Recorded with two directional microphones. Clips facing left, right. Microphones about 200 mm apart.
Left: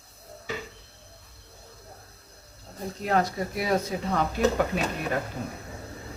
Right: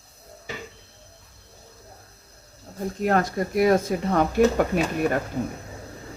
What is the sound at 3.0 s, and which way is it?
Speech, 50° right (ahead or behind).